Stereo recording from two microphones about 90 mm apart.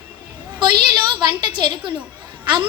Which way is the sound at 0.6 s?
60° right (ahead or behind).